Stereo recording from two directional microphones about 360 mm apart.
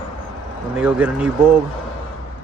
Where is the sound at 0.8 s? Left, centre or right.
Centre.